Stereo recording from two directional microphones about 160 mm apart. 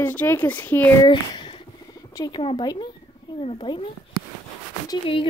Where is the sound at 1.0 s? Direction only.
30° left (ahead or behind).